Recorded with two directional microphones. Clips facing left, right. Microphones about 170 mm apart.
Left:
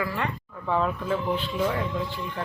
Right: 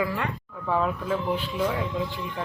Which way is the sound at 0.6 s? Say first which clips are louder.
Even; 5° right (ahead or behind).